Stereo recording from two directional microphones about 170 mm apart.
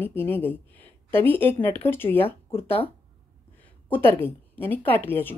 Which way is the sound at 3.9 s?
15° left (ahead or behind).